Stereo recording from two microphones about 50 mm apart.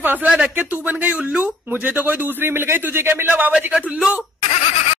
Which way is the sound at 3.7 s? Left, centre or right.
Right.